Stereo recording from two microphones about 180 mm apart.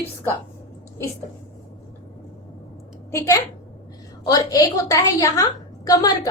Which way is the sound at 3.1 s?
15° left (ahead or behind).